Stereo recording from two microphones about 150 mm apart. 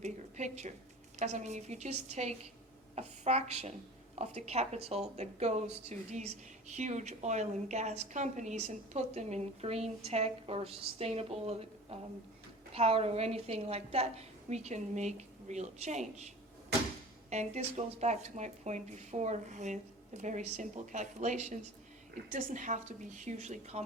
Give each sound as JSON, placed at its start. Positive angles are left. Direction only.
{"t": 0.0, "sound": "a sound", "side_deg": -50}
{"t": 1.2, "sound": "a woman's voice", "side_deg": -50}
{"t": 17.2, "sound": "a woman's voice", "side_deg": -50}